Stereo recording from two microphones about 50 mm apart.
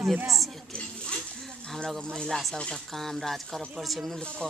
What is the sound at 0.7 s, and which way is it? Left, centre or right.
A man's voice, centre.